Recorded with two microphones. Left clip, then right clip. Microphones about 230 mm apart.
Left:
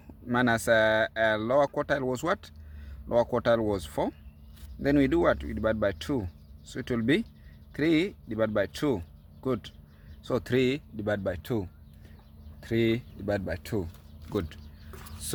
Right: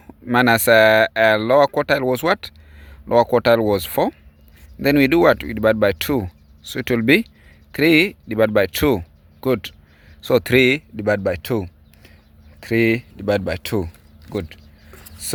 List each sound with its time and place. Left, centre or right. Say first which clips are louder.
0.3 s speech: right 10 dB; right
14.3 s speech: right 5 dB; right